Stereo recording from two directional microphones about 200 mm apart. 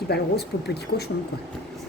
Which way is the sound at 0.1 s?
55° left (ahead or behind).